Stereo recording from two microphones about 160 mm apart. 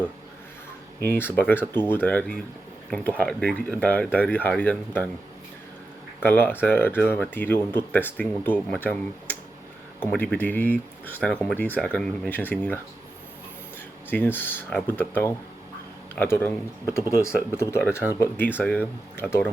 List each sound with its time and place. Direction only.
1.0 s speech: 15° left (ahead or behind)
6.2 s speech: 10° left (ahead or behind)
14.1 s speech: 10° left (ahead or behind)